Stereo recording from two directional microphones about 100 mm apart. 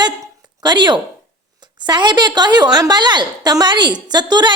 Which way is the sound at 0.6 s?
45° right (ahead or behind).